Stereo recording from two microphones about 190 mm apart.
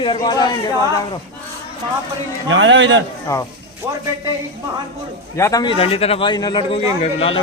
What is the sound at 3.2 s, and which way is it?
Speech, 15° left (ahead or behind).